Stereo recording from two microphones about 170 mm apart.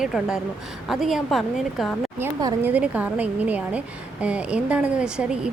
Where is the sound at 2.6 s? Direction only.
10° right (ahead or behind).